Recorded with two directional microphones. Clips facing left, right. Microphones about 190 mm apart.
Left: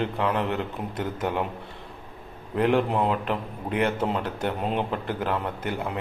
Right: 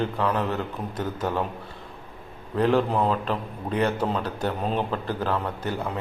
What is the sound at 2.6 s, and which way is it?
A man's voice, 20° left (ahead or behind).